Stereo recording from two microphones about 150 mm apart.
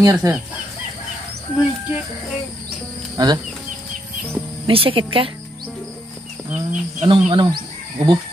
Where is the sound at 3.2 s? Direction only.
25° right (ahead or behind).